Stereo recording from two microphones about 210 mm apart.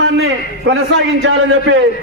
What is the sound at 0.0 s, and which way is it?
A man's voice, 60° right (ahead or behind).